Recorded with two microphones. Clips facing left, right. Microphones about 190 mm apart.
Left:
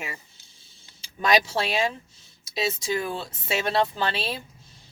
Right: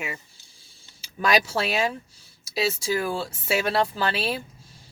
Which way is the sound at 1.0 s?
5° right (ahead or behind).